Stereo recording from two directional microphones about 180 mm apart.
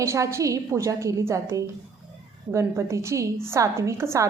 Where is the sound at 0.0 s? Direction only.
15° right (ahead or behind).